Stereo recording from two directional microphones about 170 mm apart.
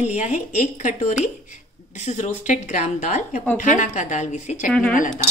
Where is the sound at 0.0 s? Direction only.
45° left (ahead or behind).